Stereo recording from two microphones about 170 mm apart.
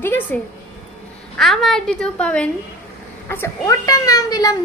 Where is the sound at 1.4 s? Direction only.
Centre (ahead or behind).